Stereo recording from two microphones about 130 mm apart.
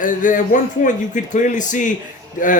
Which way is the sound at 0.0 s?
85° left.